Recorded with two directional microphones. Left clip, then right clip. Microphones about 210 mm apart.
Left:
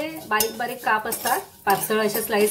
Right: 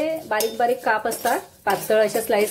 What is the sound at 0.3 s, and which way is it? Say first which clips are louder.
Speech: right 2 dB; 20° right (ahead or behind).